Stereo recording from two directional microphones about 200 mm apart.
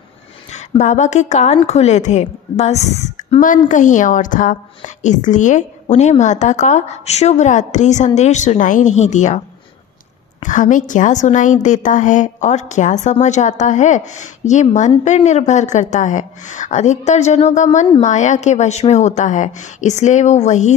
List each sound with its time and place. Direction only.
0.5 s a woman's voice: 35° left (ahead or behind)
10.4 s a woman's voice: 40° left (ahead or behind)